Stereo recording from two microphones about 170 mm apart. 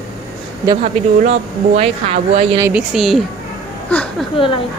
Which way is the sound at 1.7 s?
35° right (ahead or behind).